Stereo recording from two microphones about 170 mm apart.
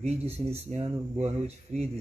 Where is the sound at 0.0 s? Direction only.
35° right (ahead or behind).